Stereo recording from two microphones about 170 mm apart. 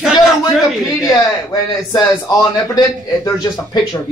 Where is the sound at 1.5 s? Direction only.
20° left (ahead or behind).